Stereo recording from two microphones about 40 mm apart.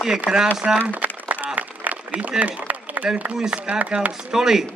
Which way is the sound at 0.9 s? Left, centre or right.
Right.